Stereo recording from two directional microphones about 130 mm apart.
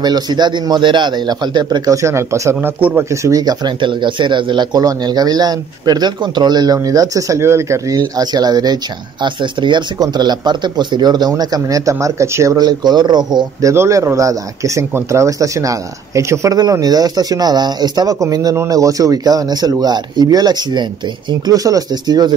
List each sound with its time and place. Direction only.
0.0 s speech: 35° right (ahead or behind)